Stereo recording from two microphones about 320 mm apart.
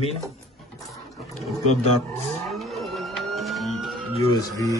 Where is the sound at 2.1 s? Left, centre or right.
Centre.